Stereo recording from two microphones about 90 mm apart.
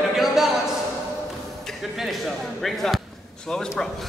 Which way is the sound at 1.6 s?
Centre (ahead or behind).